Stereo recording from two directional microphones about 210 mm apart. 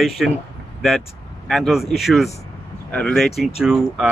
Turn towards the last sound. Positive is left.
turn(degrees=0)  # may be behind; listen again after turning